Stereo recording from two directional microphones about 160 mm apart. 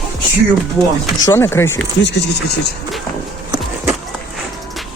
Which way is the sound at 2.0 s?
90° left.